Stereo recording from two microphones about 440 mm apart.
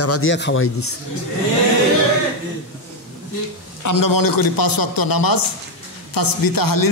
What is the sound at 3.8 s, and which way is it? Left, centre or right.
Speech, left.